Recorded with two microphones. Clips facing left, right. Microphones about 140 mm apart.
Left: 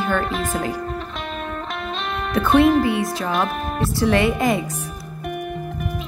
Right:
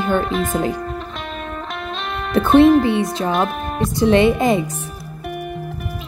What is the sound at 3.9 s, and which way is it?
Speech, 25° right (ahead or behind).